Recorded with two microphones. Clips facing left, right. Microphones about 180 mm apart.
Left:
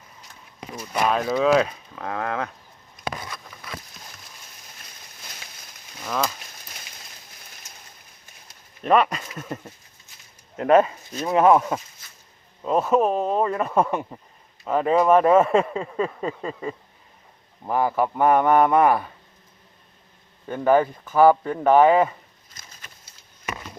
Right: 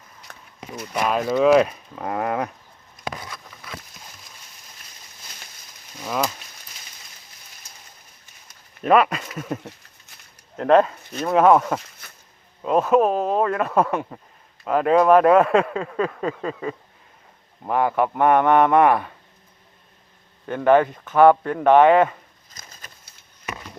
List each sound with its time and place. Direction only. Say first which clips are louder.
1.1 s speech: right 4 dB; centre (ahead or behind)
8.8 s speech: right 2 dB; 5° right (ahead or behind)
10.6 s speech: right 1 dB; 5° left (ahead or behind)
12.0 s a sound: right 5 dB; 60° right (ahead or behind)
12.9 s speech: right 2 dB; centre (ahead or behind)
20.5 s speech: right 2 dB; 5° left (ahead or behind)